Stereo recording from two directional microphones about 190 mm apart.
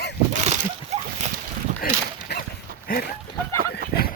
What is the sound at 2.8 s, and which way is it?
Goat, 50° left (ahead or behind).